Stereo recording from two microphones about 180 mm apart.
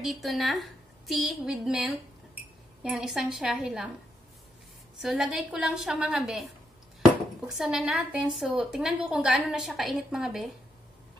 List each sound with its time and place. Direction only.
0.0 s a woman's voice: centre (ahead or behind)
4.9 s a woman's voice: centre (ahead or behind)